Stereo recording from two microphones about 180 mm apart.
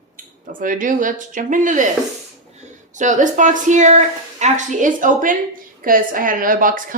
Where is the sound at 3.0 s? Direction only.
45° right (ahead or behind).